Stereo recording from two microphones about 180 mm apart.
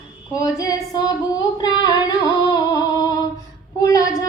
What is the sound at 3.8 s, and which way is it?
Child singing, 20° left (ahead or behind).